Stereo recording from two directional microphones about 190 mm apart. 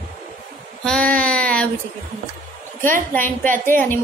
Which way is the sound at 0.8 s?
5° left (ahead or behind).